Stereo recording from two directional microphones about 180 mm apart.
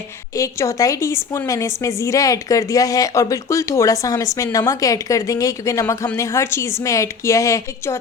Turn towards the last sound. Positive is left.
turn(degrees=15)  # may be behind; listen again after turning